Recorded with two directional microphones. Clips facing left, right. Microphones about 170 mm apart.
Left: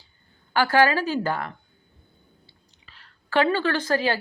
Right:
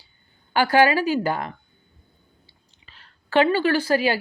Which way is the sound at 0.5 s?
15° right (ahead or behind).